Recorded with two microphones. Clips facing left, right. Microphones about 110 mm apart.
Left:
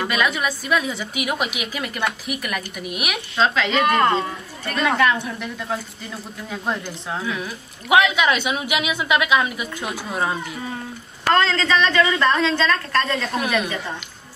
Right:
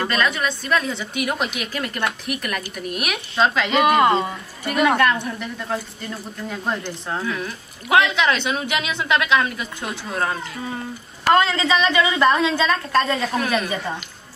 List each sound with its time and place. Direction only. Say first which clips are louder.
0.0 s a woman's voice: even; 5° left (ahead or behind)
4.9 s a woman's voice: even; centre (ahead or behind)
11.2 s a woman's voice: right 1 dB; 10° right (ahead or behind)